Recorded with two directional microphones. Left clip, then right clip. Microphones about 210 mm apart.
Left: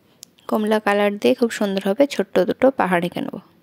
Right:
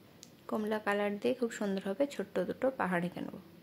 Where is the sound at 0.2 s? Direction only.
45° left (ahead or behind).